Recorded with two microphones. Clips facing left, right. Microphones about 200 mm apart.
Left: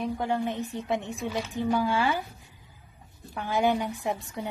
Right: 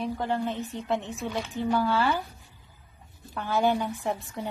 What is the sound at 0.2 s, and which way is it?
Speech, 15° left (ahead or behind).